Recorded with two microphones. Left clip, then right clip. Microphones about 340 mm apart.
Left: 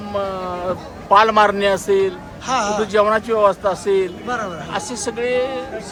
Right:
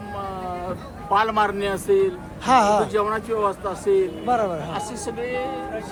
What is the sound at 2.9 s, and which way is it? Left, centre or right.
Speech, left.